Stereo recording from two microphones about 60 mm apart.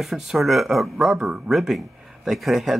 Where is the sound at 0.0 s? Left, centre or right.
Centre.